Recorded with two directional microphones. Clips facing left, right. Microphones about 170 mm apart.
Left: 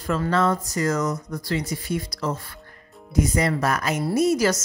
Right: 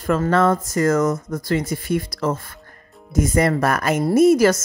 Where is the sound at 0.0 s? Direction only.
55° right (ahead or behind).